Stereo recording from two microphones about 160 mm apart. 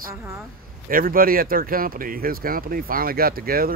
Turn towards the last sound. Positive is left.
turn(degrees=-65)  # may be behind; listen again after turning